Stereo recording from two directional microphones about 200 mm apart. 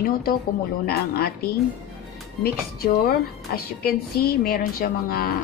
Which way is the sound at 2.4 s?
50° left (ahead or behind).